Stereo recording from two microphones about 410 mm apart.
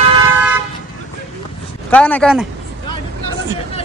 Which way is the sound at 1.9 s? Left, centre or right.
Centre.